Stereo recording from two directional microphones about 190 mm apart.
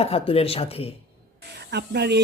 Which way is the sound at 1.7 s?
60° right (ahead or behind).